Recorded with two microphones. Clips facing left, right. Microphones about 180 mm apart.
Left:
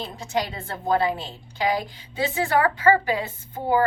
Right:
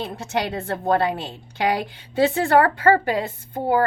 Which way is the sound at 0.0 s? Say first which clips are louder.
Right 2 dB; 65° right (ahead or behind).